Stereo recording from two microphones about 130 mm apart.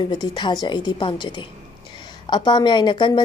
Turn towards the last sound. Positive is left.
turn(degrees=35)  # may be behind; listen again after turning